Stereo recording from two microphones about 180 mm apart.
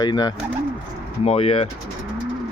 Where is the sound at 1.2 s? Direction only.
35° left (ahead or behind).